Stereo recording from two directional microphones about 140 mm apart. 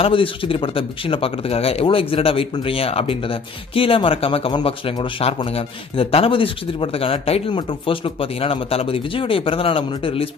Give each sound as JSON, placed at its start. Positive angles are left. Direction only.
{"t": 0.0, "sound": "a man's voice", "side_deg": 40}